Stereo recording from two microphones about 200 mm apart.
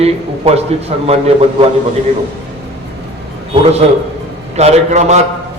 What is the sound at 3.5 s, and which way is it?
A man's voice, 30° right (ahead or behind).